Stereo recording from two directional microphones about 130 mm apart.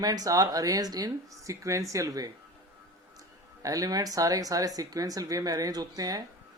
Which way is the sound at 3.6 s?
25° right (ahead or behind).